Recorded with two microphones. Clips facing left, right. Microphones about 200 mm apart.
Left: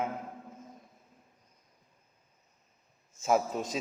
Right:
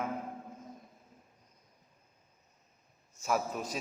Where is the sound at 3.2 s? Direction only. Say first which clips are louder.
Left 5 dB; 25° left (ahead or behind).